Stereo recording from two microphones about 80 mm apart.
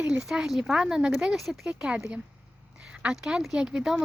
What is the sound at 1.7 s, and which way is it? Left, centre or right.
Speech, centre.